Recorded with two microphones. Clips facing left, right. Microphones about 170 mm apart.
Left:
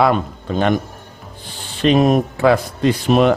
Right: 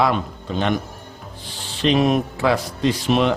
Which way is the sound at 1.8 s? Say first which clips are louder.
Left 4 dB; 50° left (ahead or behind).